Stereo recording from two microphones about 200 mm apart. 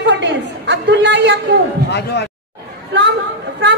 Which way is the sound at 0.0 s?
60° right (ahead or behind).